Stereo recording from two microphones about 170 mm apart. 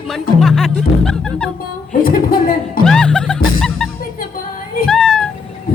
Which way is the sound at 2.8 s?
5° left (ahead or behind).